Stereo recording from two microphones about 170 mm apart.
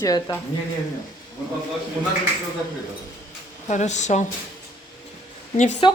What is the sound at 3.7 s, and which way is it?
Speech, 45° left (ahead or behind).